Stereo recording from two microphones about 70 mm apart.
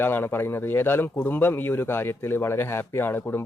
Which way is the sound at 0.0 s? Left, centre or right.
Left.